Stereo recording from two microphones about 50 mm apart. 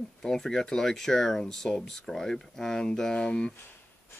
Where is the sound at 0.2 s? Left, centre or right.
Centre.